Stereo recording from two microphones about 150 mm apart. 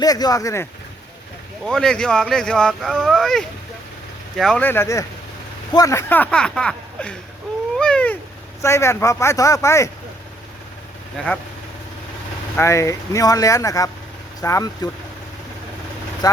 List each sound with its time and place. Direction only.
0.0 s speech: 25° left (ahead or behind)
1.6 s speech: 5° left (ahead or behind)
4.6 s speech: 15° left (ahead or behind)
7.8 s cat: 5° left (ahead or behind)
8.6 s speech: 20° left (ahead or behind)
11.2 s speech: 5° left (ahead or behind)
12.5 s speech: 20° left (ahead or behind)
16.2 s speech: 25° left (ahead or behind)